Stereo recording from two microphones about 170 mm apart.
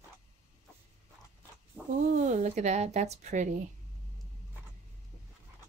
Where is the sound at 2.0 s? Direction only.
45° right (ahead or behind).